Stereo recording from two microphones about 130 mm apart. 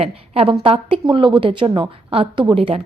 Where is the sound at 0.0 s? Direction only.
45° right (ahead or behind).